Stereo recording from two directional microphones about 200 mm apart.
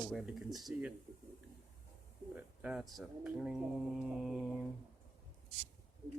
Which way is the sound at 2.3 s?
5° right (ahead or behind).